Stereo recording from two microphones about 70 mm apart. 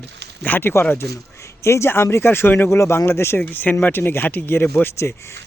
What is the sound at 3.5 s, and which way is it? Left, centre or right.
Speech, left.